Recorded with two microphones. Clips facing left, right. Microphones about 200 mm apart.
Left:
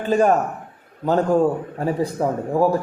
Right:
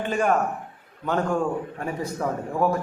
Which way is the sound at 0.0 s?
40° left (ahead or behind).